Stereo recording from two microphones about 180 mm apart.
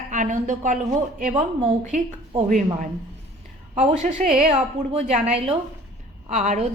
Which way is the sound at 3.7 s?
40° right (ahead or behind).